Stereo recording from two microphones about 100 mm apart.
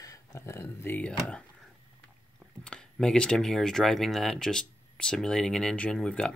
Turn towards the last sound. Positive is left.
turn(degrees=10)  # may be behind; listen again after turning